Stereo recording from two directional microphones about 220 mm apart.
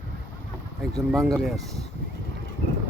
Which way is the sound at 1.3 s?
Centre (ahead or behind).